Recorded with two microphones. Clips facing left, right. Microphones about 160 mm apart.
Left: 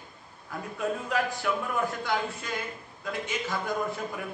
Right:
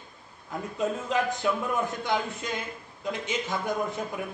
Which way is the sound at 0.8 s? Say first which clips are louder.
Right 2 dB; 20° right (ahead or behind).